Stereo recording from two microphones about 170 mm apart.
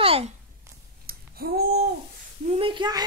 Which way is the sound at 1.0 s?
60° right (ahead or behind).